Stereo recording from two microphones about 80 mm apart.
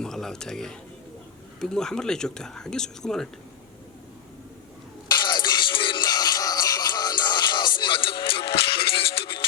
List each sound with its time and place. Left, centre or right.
0.0 s speech: centre
5.0 s music: left